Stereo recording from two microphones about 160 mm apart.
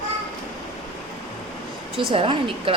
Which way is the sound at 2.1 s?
35° right (ahead or behind).